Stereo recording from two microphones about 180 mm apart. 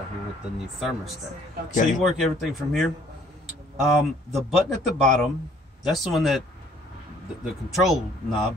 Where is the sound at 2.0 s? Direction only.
Centre (ahead or behind).